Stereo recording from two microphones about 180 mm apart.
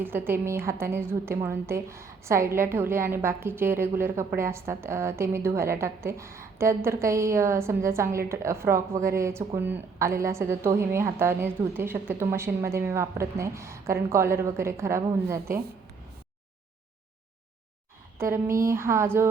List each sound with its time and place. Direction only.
0.0 s a woman's voice: 10° right (ahead or behind)
18.2 s a woman's voice: 15° right (ahead or behind)